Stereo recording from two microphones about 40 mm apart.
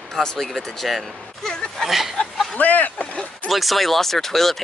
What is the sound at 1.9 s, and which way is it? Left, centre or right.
Speech, centre.